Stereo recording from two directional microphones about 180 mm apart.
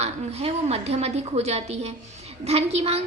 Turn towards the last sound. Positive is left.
turn(degrees=-35)  # may be behind; listen again after turning